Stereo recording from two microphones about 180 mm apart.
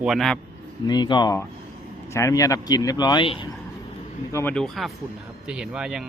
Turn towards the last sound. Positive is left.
turn(degrees=-5)  # may be behind; listen again after turning